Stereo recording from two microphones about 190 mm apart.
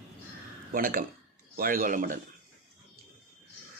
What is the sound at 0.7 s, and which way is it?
A man's voice, 50° right (ahead or behind).